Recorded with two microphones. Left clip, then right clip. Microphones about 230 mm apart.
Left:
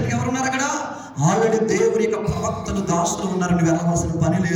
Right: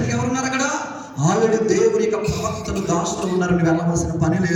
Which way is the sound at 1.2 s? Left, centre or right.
Centre.